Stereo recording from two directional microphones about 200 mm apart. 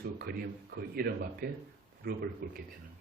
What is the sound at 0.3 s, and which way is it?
Speech, 50° right (ahead or behind).